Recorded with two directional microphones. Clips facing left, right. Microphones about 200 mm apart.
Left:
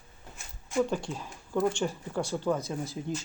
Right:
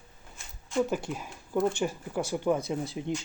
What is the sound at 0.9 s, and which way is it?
Speech, 10° right (ahead or behind).